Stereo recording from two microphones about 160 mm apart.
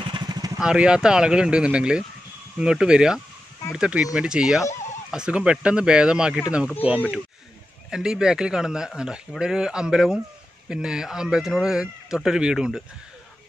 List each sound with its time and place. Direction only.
0.0 s vehicle: 25° right (ahead or behind)
0.6 s a man's voice: 5° right (ahead or behind)
7.9 s a man's voice: 5° right (ahead or behind)